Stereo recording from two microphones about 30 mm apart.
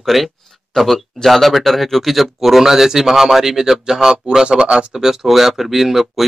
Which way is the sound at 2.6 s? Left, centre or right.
Centre.